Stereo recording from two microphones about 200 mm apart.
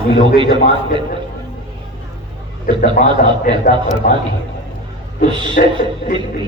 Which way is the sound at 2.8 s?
40° left (ahead or behind).